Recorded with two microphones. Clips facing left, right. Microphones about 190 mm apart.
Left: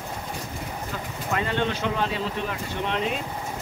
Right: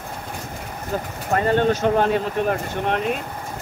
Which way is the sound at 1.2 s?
45° right (ahead or behind).